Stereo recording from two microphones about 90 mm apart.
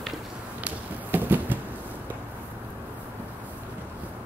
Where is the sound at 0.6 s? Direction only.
20° right (ahead or behind).